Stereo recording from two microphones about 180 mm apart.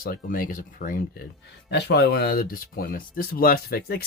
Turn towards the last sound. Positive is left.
turn(degrees=55)  # may be behind; listen again after turning